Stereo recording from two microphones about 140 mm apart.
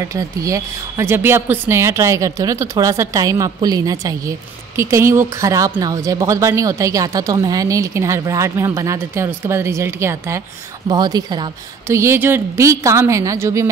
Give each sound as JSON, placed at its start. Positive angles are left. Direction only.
{"t": 0.0, "sound": "a woman's voice", "side_deg": -25}
{"t": 10.9, "sound": "speech", "side_deg": -30}
{"t": 11.9, "sound": "a woman's voice", "side_deg": -20}